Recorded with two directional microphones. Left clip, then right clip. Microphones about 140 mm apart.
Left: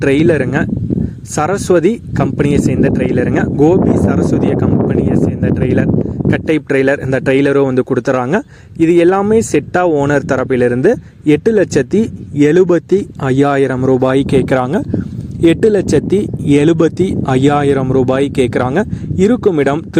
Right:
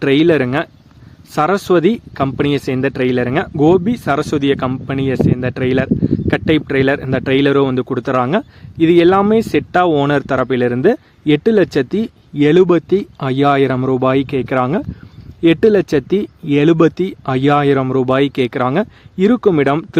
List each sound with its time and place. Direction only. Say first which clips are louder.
0.0 s speech: left 1 dB; 30° left (ahead or behind)